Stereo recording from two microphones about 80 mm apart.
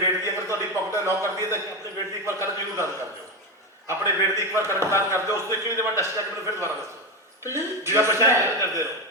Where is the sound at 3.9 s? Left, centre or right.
Right.